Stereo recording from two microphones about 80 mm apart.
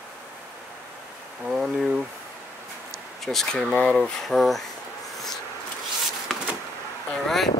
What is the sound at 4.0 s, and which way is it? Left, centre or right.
Speech, centre.